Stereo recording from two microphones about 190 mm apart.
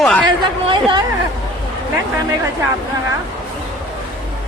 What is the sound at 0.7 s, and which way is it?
Speech, 25° right (ahead or behind).